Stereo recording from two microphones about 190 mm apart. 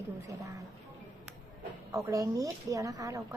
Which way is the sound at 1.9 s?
15° right (ahead or behind).